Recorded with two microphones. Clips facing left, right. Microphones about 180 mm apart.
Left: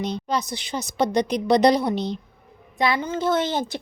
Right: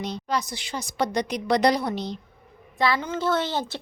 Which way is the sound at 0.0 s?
20° left (ahead or behind).